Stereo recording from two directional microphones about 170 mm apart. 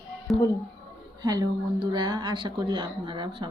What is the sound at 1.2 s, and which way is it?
Speech, 20° right (ahead or behind).